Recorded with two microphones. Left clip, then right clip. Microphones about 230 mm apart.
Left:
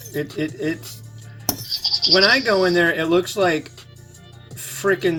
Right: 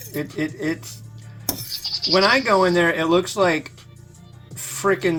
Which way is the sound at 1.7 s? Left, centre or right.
Left.